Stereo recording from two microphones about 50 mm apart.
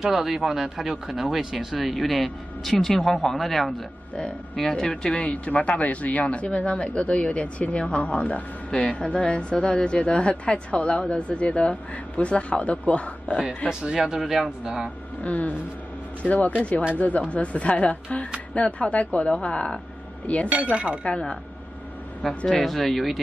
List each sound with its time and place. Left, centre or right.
0.0 s speech: centre; by 13.4 s left
13.7 s speech: centre
15.2 s speech: left
20.4 s speech: right
22.5 s speech: centre